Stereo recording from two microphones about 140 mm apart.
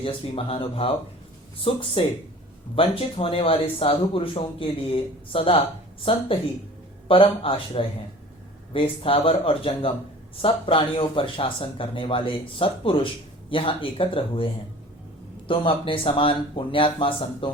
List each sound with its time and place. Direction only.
0.0 s speech: 40° left (ahead or behind)